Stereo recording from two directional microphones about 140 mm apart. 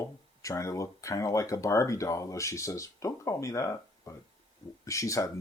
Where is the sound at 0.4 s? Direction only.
25° left (ahead or behind).